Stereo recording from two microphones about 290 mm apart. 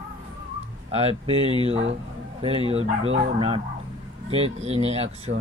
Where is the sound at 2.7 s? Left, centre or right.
Right.